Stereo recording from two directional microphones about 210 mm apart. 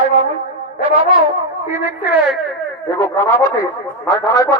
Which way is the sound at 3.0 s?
10° left (ahead or behind).